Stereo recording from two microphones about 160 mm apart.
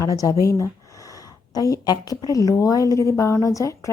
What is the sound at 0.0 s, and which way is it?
Speech, 20° left (ahead or behind).